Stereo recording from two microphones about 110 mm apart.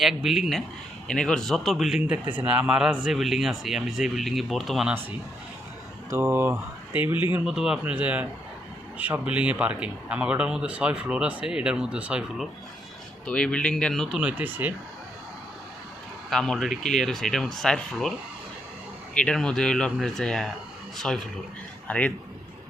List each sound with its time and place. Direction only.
0.0 s speech: 5° right (ahead or behind)
6.1 s speech: 25° right (ahead or behind)
7.4 s speech: 5° right (ahead or behind)
13.2 s speech: 10° left (ahead or behind)
14.2 s speech: 15° right (ahead or behind)
16.3 s speech: 5° left (ahead or behind)
19.1 s a man's voice: 5° left (ahead or behind)